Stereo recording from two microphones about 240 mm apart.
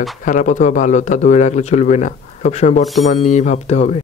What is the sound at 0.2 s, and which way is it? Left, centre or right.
Speech, left.